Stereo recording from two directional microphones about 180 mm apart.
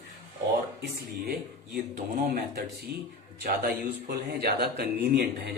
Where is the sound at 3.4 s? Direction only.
60° right (ahead or behind).